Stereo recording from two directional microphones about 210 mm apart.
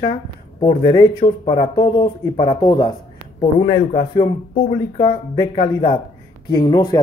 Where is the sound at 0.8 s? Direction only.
25° left (ahead or behind).